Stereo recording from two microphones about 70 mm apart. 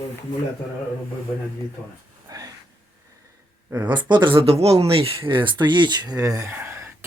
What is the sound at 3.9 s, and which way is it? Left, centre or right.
Speech, right.